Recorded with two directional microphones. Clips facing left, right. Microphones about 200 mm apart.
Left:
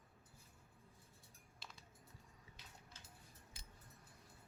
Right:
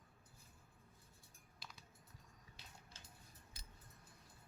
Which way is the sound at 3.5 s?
40° right (ahead or behind).